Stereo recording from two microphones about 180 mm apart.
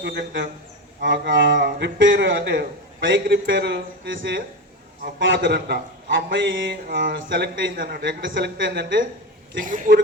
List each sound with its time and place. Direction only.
0.0 s a man's voice: 65° right (ahead or behind)
1.0 s a sound: 75° right (ahead or behind)
1.5 s a man's voice: 65° right (ahead or behind); by 4.4 s 90° right
5.2 s a man's voice: 65° right (ahead or behind)
9.6 s a woman's voice: 45° right (ahead or behind)